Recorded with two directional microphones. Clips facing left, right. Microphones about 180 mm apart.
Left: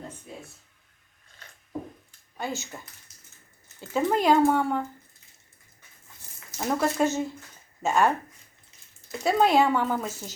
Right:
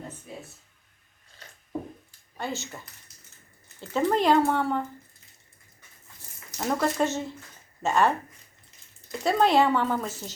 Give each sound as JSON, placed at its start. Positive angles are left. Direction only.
{"t": 2.4, "sound": "speech", "side_deg": 0}
{"t": 6.6, "sound": "speech", "side_deg": 5}
{"t": 9.2, "sound": "speech", "side_deg": 0}